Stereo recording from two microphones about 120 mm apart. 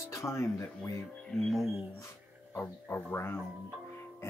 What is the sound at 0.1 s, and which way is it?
Speech, 25° left (ahead or behind).